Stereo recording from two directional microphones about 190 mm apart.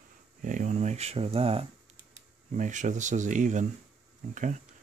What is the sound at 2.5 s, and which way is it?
Speech, 40° right (ahead or behind).